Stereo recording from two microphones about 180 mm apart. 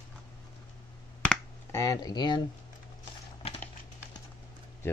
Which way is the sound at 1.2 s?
15° left (ahead or behind).